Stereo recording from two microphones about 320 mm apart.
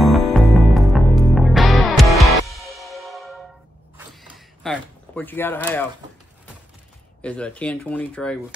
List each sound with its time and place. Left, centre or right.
0.0 s music: centre
4.1 s a sound: centre
7.2 s speech: centre